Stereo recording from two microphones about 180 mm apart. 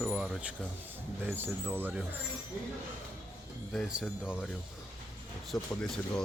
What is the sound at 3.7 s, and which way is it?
Speech, centre (ahead or behind).